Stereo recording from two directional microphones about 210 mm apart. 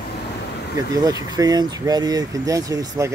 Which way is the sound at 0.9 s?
15° right (ahead or behind).